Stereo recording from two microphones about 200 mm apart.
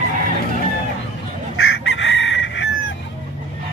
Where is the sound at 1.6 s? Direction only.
65° left (ahead or behind).